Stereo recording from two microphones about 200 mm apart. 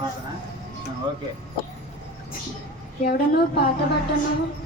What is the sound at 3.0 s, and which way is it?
Speech, 50° left (ahead or behind).